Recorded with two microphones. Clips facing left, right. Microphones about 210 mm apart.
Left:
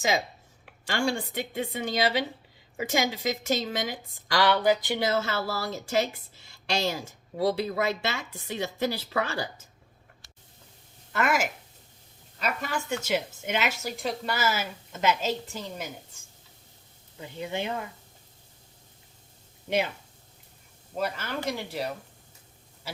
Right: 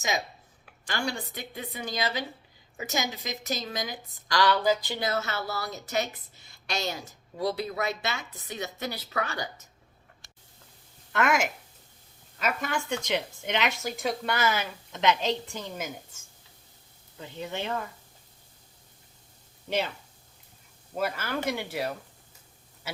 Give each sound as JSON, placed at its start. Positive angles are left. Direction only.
{"t": 0.9, "sound": "a woman's voice", "side_deg": 30}
{"t": 11.1, "sound": "a woman's voice", "side_deg": 0}
{"t": 17.2, "sound": "speech", "side_deg": 10}
{"t": 20.9, "sound": "a woman's voice", "side_deg": -5}